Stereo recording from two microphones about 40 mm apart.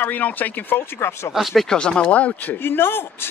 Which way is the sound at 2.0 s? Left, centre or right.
Left.